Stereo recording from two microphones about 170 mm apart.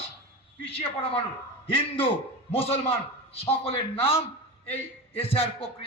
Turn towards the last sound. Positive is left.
turn(degrees=35)  # may be behind; listen again after turning